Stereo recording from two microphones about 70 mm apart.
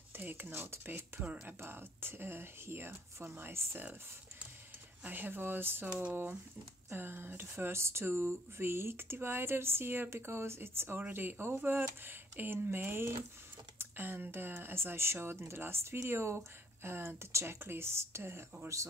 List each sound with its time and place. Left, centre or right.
0.1 s speech: right
1.6 s speech: right
5.0 s speech: right
6.9 s speech: right